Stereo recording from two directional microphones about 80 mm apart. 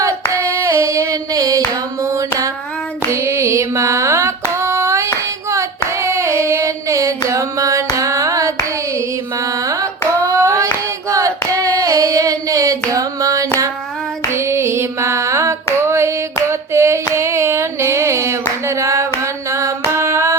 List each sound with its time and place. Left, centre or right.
0.5 s singing: right
2.0 s a sound: right
5.5 s female singing: right
7.3 s carnatic music: right
10.2 s hands: right
11.1 s singing: right
14.3 s female singing: right
15.9 s a sound: right
19.2 s music: right